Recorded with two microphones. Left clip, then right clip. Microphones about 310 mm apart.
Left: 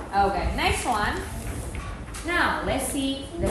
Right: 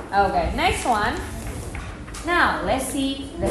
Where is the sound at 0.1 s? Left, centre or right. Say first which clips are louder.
Right 3 dB; right.